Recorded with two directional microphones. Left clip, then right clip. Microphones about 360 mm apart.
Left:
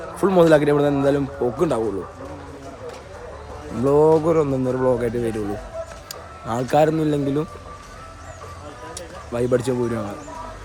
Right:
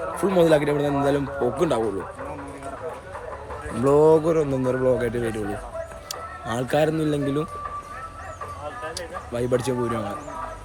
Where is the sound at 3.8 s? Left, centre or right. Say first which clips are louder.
Left 1 dB; centre.